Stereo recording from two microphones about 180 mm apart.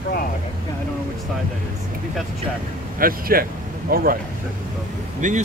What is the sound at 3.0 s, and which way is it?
Speech, 55° right (ahead or behind).